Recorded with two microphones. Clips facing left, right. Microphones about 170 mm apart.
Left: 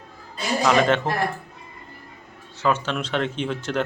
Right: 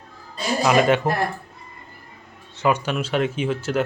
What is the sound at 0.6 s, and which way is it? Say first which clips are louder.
Speech: right 2 dB; 10° right (ahead or behind).